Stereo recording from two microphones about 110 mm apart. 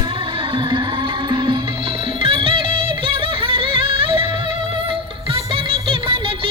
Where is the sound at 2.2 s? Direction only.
60° right (ahead or behind).